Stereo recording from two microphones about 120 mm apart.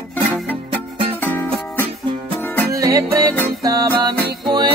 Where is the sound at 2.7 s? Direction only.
30° right (ahead or behind).